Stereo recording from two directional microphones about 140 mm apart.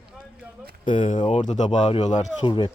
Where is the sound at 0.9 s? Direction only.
65° left (ahead or behind).